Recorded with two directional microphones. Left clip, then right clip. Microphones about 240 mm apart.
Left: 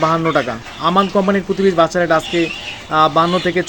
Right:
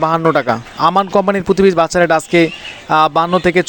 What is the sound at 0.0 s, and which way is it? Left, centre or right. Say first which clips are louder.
Speech: right 2 dB; right.